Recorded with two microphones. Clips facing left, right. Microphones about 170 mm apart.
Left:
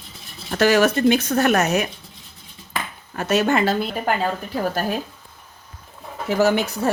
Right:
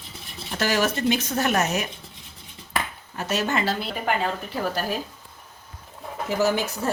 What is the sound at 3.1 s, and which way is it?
Speech, 60° left (ahead or behind).